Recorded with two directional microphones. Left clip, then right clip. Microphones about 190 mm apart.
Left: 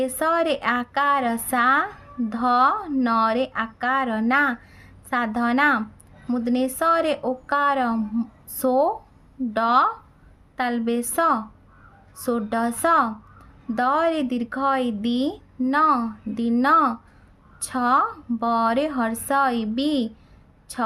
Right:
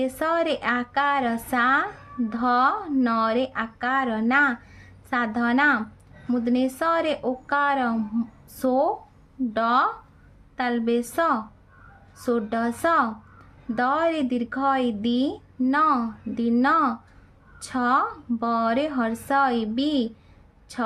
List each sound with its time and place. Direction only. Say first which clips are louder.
0.0 s a woman's voice: left 2 dB; 15° left (ahead or behind)